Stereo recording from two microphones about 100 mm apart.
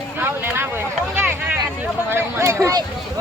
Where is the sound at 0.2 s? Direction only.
25° right (ahead or behind).